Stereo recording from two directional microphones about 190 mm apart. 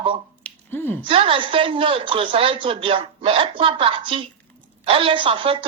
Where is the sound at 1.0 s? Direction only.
30° right (ahead or behind).